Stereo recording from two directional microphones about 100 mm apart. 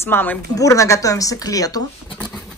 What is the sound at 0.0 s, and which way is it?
Speech, 20° left (ahead or behind).